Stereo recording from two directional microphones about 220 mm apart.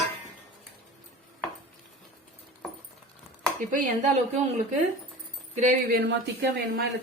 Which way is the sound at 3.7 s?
35° right (ahead or behind).